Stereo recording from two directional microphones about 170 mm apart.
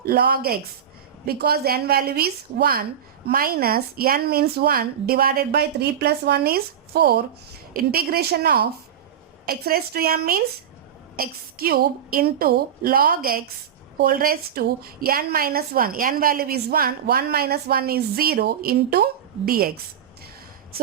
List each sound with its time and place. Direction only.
0.0 s a woman's voice: 65° right (ahead or behind)